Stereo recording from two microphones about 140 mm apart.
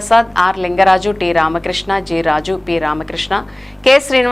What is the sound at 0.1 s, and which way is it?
A woman's voice, centre (ahead or behind).